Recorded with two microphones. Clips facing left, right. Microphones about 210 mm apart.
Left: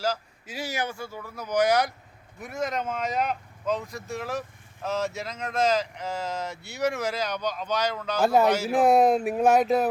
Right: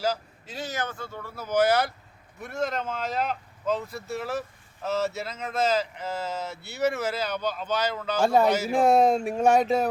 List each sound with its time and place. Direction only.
0.5 s speech: 10° left (ahead or behind)